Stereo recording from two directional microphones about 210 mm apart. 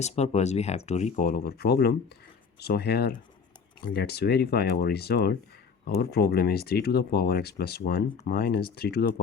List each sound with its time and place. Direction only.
0.0 s speech: 30° left (ahead or behind)